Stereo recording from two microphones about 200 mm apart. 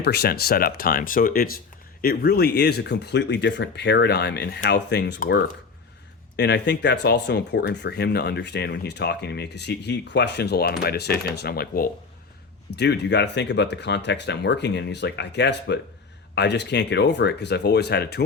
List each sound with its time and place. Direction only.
0.0 s speech: 55° left (ahead or behind)